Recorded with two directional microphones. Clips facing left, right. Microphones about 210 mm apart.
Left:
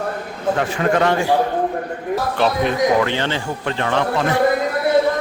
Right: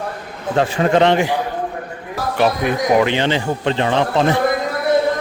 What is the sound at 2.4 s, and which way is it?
Speech, 15° right (ahead or behind).